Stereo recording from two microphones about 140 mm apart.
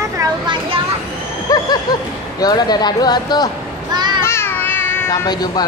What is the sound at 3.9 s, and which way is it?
Children playing, 30° right (ahead or behind).